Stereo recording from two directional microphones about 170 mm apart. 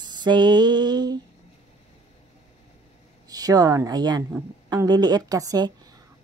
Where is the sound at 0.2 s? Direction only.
25° right (ahead or behind).